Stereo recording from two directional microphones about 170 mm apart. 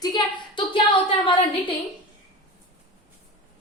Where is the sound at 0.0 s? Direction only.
25° left (ahead or behind).